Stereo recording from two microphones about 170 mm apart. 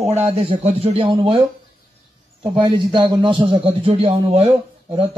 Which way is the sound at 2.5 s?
30° right (ahead or behind).